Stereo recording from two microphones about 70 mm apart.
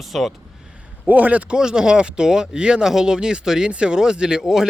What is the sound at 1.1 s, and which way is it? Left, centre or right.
Speech, right.